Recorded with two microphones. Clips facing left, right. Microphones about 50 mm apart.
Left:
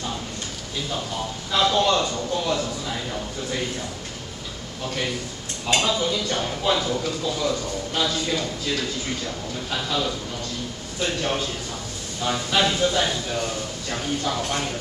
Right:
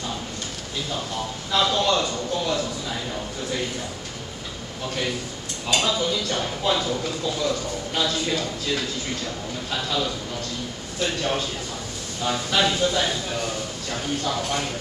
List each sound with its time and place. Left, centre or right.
1.5 s speech: centre
5.8 s speech: centre
12.2 s speech: centre